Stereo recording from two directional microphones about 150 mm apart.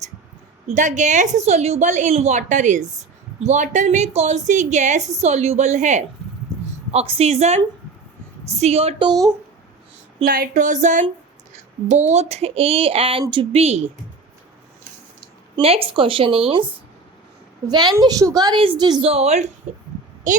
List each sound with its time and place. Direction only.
0.7 s a woman's voice: 55° right (ahead or behind)
6.9 s a woman's voice: 40° right (ahead or behind)
10.2 s a woman's voice: 70° right (ahead or behind); by 13.8 s 45° right (ahead or behind)
15.6 s speech: 40° right (ahead or behind)
17.7 s a woman's voice: 30° right (ahead or behind)
19.0 s a woman's voice: 45° right (ahead or behind)